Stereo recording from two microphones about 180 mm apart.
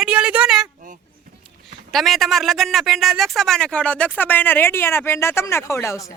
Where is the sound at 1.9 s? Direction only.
Centre (ahead or behind).